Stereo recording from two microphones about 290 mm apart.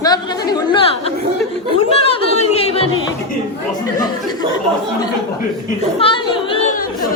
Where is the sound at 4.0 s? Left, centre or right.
Centre.